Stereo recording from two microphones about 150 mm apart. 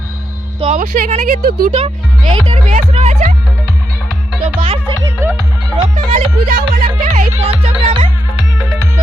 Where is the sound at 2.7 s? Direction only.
50° right (ahead or behind).